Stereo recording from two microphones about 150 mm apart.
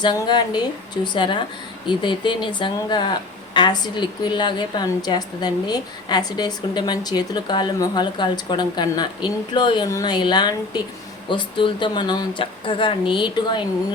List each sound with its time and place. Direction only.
0.0 s speech: 30° left (ahead or behind)